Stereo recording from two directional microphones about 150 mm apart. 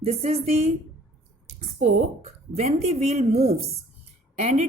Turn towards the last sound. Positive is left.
turn(degrees=-45)  # may be behind; listen again after turning